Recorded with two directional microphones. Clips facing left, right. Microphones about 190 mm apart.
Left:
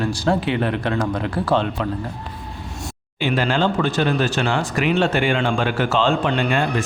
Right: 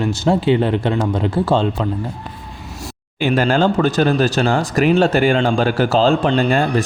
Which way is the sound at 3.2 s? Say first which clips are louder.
Right 4 dB; 45° right (ahead or behind).